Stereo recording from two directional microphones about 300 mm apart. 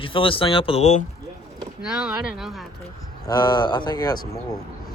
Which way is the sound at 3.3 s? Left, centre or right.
Centre.